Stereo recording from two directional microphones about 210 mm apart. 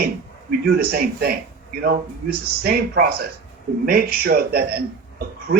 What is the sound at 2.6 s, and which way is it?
Speech, 50° right (ahead or behind).